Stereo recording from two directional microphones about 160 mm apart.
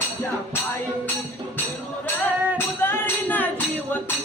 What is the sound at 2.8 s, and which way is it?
Music, 15° left (ahead or behind).